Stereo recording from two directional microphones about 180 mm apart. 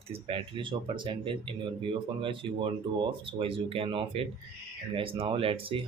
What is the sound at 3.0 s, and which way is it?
Speech, 30° right (ahead or behind).